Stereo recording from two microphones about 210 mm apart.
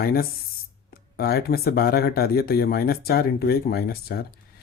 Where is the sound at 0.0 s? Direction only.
45° left (ahead or behind).